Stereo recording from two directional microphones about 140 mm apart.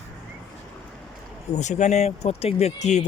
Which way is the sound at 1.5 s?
55° left (ahead or behind).